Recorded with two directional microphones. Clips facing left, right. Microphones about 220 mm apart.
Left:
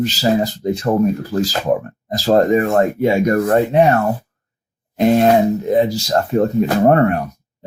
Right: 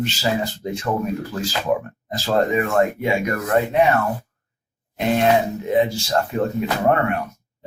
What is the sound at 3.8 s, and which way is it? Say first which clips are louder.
Speech: left 4 dB; 45° left (ahead or behind).